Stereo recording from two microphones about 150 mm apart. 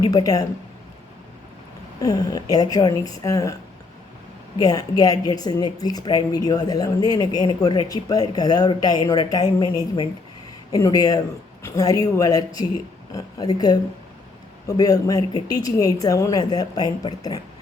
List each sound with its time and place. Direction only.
0.0 s speech: 25° left (ahead or behind)
2.0 s speech: 25° left (ahead or behind)
4.5 s speech: 25° left (ahead or behind)